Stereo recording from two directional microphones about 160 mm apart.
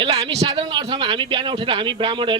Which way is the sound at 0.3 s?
30° right (ahead or behind).